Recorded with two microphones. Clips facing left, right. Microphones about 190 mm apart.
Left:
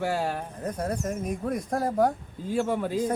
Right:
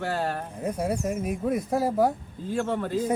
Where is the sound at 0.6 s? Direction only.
10° right (ahead or behind).